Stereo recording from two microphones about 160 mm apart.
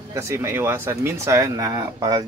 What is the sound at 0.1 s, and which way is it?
Speech, 15° right (ahead or behind).